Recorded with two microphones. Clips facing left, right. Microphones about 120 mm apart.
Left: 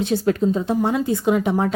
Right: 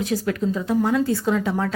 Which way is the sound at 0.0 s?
30° left (ahead or behind).